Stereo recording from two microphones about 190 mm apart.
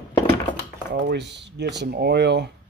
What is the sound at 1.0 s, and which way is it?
Speech, 65° right (ahead or behind).